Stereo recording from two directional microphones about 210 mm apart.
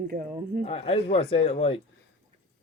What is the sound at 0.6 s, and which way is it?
Speech, 30° left (ahead or behind).